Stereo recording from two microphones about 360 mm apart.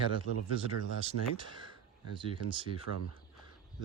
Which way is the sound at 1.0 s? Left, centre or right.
Centre.